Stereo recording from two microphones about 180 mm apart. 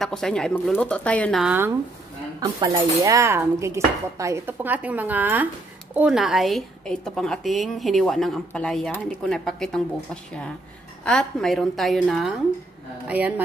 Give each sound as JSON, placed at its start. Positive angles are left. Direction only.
{"t": 0.0, "sound": "a woman's voice", "side_deg": 5}
{"t": 1.4, "sound": "speech", "side_deg": -10}
{"t": 2.4, "sound": "a woman's voice", "side_deg": -25}
{"t": 11.1, "sound": "a woman's voice", "side_deg": 5}